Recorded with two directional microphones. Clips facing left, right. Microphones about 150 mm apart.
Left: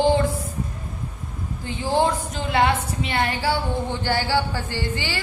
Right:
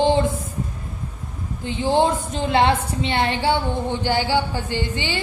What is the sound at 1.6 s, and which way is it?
A woman's voice, 20° right (ahead or behind).